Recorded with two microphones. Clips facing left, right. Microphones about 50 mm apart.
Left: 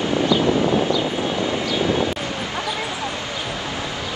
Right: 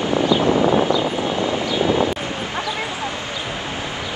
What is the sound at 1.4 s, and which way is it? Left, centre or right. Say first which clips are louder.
Vehicle: right 2 dB; right.